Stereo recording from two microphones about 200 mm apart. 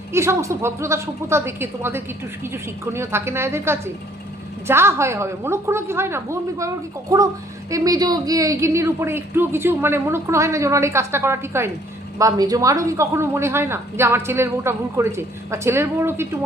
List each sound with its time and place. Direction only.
0.1 s speech: 15° right (ahead or behind)